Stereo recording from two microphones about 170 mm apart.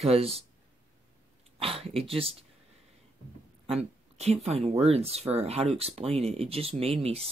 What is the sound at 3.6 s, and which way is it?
Speech, 35° right (ahead or behind).